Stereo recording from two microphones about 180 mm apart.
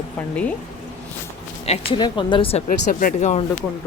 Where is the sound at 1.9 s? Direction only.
25° left (ahead or behind); by 3.3 s 50° left (ahead or behind).